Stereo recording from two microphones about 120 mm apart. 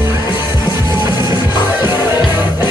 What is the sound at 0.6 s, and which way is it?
Music, 40° left (ahead or behind).